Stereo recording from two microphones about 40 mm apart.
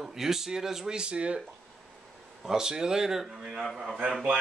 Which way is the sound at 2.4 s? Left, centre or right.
Centre.